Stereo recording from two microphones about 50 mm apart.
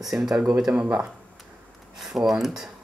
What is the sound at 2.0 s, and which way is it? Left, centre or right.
Speech, centre.